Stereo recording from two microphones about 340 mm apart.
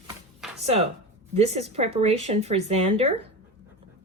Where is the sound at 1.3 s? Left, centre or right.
Centre.